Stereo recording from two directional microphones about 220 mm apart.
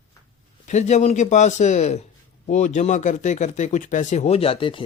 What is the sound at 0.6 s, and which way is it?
A man's voice, 30° left (ahead or behind).